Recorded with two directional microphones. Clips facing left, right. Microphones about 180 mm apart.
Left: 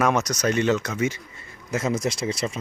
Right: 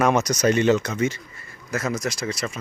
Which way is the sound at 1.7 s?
25° left (ahead or behind).